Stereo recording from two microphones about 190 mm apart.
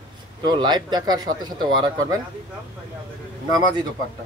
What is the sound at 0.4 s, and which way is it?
Speech, 20° right (ahead or behind).